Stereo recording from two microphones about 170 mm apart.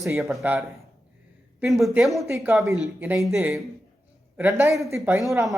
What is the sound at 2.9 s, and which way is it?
Speech, 10° right (ahead or behind).